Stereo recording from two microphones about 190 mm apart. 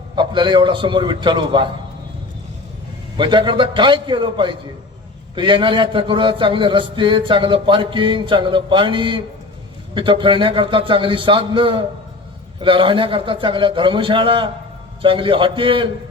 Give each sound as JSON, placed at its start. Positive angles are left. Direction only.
{"t": 0.2, "sound": "a man's voice", "side_deg": -25}
{"t": 3.2, "sound": "a man's voice", "side_deg": -25}